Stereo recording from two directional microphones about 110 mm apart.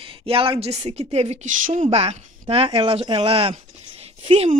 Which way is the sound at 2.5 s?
60° right (ahead or behind).